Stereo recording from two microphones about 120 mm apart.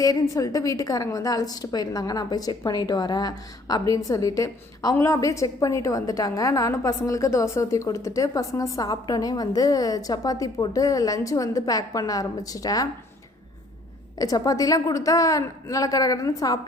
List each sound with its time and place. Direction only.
0.0 s a woman's voice: 30° left (ahead or behind)
14.2 s a woman's voice: 30° left (ahead or behind)